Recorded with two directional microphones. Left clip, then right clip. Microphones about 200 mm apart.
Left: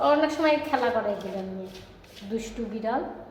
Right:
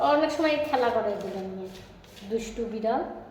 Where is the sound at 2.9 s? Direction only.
10° left (ahead or behind).